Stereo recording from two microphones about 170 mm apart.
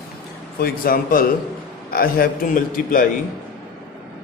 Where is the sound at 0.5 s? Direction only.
60° left (ahead or behind).